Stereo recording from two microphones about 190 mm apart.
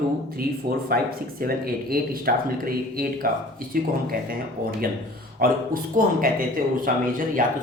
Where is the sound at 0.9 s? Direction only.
50° right (ahead or behind).